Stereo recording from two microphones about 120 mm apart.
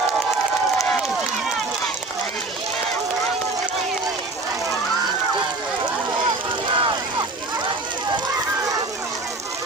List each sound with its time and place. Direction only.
6.7 s vehicle: 45° right (ahead or behind)